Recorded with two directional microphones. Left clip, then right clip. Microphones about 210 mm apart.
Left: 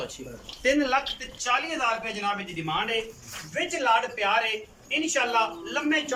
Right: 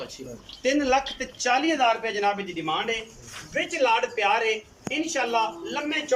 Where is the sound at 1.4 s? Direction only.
40° right (ahead or behind).